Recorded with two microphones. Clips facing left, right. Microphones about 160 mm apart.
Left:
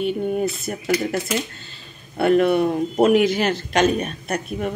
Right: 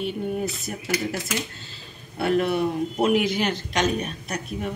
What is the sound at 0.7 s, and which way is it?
Speech, 65° left (ahead or behind).